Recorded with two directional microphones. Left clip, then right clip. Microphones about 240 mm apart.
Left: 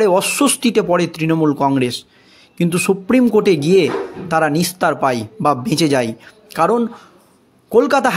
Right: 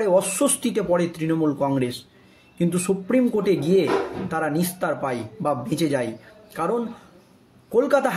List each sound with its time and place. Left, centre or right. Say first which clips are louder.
0.0 s a man's voice: left 6 dB; left